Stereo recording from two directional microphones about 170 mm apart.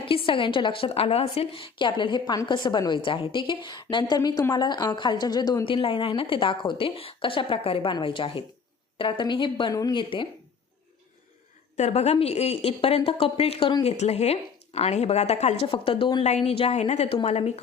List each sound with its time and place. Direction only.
0.1 s a woman's voice: 30° left (ahead or behind)
11.8 s speech: 40° left (ahead or behind)
13.9 s speech: 40° left (ahead or behind)
16.2 s speech: 40° left (ahead or behind)